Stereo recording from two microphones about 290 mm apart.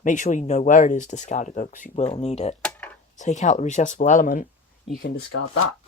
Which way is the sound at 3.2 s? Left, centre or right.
Left.